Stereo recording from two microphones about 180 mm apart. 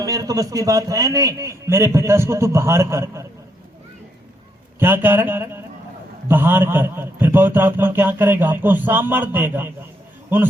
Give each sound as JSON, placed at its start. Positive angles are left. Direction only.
{"t": 0.0, "sound": "a man's voice", "side_deg": -20}
{"t": 4.8, "sound": "a sound", "side_deg": -10}
{"t": 6.2, "sound": "a man's voice", "side_deg": -10}